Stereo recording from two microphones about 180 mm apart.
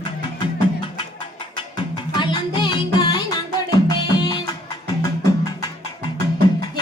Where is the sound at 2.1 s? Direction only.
25° left (ahead or behind).